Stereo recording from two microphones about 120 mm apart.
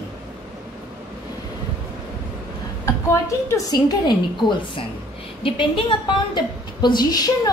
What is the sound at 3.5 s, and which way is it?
A woman's voice, 35° left (ahead or behind).